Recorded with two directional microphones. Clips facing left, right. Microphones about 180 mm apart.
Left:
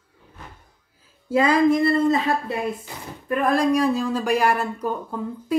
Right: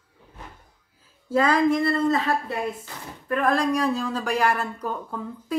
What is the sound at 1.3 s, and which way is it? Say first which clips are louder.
Speech: left 3 dB; 10° left (ahead or behind).